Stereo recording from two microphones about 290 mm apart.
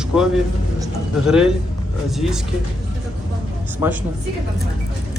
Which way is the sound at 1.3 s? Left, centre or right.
Centre.